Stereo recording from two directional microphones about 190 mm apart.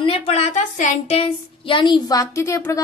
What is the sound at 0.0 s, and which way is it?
A woman's voice, 30° left (ahead or behind).